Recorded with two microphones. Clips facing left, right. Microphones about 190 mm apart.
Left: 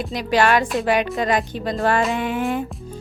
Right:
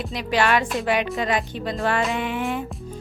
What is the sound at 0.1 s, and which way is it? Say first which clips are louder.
Speech: left 3 dB; 40° left (ahead or behind).